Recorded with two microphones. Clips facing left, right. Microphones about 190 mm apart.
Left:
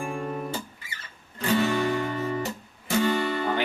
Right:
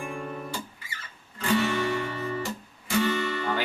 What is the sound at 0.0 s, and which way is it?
Music, 50° left (ahead or behind).